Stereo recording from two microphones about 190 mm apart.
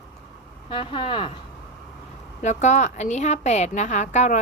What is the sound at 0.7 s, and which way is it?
Speech, 25° left (ahead or behind).